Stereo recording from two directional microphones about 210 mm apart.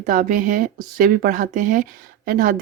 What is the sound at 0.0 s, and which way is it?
Speech, 40° right (ahead or behind).